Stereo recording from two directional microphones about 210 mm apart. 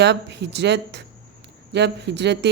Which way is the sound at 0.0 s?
55° right (ahead or behind).